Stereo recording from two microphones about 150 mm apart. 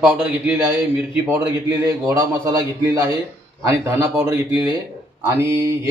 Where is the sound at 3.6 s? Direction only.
20° right (ahead or behind).